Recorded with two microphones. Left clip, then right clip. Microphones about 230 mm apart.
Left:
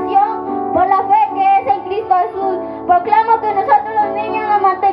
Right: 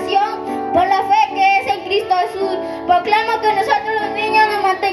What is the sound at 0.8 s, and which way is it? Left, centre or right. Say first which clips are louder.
Music: left 1 dB; right.